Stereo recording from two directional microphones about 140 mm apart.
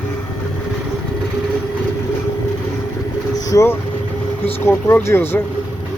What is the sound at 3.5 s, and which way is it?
Speech, 20° left (ahead or behind).